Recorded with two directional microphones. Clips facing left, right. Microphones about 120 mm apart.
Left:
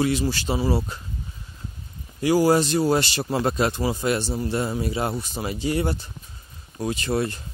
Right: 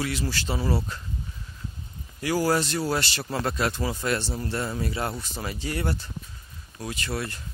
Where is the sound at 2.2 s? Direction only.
20° left (ahead or behind).